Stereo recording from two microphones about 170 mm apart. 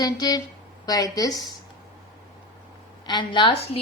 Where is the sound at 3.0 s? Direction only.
25° left (ahead or behind).